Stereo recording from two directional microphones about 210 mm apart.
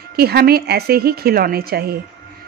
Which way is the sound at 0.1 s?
50° right (ahead or behind).